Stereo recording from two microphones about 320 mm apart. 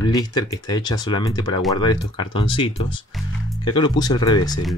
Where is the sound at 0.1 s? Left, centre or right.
Centre.